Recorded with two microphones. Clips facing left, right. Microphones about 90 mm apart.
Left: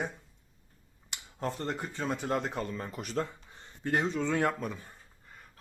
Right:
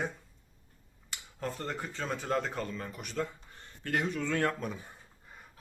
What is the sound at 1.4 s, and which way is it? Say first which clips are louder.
Speech: left 2 dB; 20° left (ahead or behind).